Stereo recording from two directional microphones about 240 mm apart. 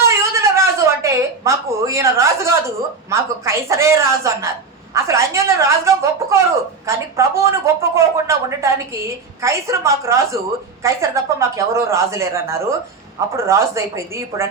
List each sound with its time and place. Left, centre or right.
0.0 s a woman's voice: centre